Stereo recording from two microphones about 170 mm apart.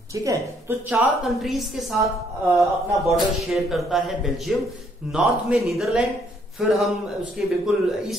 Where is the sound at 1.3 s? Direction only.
Centre (ahead or behind).